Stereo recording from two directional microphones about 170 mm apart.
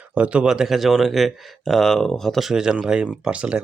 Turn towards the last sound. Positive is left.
turn(degrees=-5)  # may be behind; listen again after turning